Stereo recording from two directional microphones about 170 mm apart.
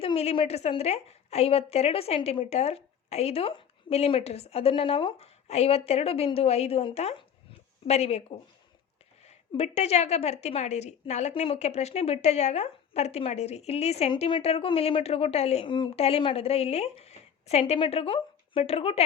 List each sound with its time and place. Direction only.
0.0 s a woman's voice: 35° left (ahead or behind)
9.2 s a woman's voice: 40° left (ahead or behind)